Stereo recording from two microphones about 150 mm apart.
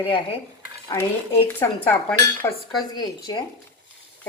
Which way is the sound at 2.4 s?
20° left (ahead or behind).